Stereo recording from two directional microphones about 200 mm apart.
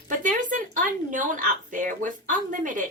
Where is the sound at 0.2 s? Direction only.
40° right (ahead or behind).